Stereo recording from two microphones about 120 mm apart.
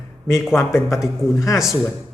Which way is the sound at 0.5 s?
20° left (ahead or behind).